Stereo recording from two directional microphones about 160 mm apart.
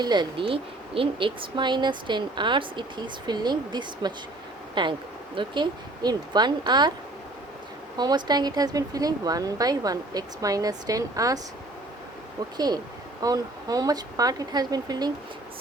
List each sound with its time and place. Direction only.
0.0 s speech: 25° right (ahead or behind)
7.9 s speech: 25° right (ahead or behind)
12.5 s speech: 25° right (ahead or behind)